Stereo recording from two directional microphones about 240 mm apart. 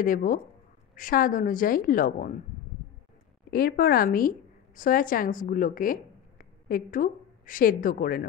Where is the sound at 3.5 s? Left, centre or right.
Left.